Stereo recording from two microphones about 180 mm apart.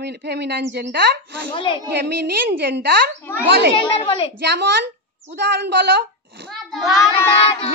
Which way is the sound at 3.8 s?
30° left (ahead or behind).